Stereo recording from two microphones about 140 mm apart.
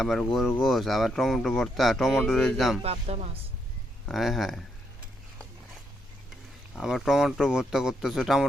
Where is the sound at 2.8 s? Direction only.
45° right (ahead or behind).